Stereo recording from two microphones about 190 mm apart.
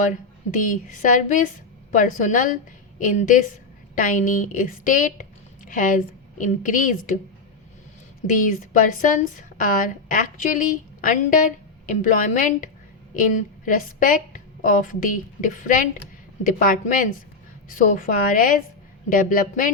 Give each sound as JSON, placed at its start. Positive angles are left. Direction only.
{"t": 0.0, "sound": "a woman's voice", "side_deg": 45}
{"t": 8.4, "sound": "a woman's voice", "side_deg": 45}
{"t": 13.7, "sound": "a woman's voice", "side_deg": 45}